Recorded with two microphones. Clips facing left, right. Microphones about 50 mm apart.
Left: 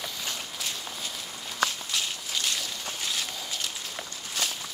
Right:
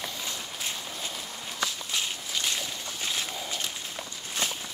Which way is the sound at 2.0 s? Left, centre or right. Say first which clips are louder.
Even; centre.